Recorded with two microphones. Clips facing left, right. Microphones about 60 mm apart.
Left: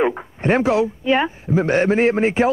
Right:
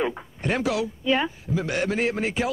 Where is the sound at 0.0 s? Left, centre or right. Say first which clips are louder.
Left 7 dB; left.